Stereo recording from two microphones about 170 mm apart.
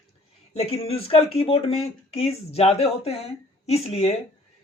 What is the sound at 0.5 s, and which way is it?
Speech, 35° left (ahead or behind).